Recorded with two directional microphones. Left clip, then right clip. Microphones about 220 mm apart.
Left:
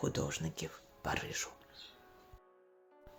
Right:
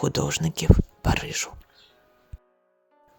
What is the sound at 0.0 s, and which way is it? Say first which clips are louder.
Speech: right 12 dB; 50° right (ahead or behind).